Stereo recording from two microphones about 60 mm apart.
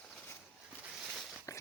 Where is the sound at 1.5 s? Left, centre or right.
Left.